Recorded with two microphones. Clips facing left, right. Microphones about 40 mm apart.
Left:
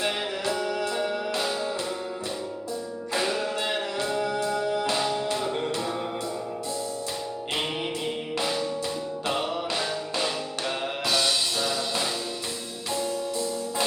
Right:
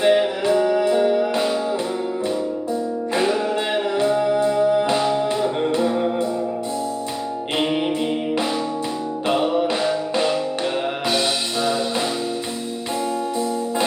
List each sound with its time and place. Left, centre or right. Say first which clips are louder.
0.0 s music: right 11 dB; right
4.0 s music: right 10 dB; right
7.6 s music: right 11 dB; centre
9.2 s music: right 10 dB; right
11.1 s music: right 2 dB; right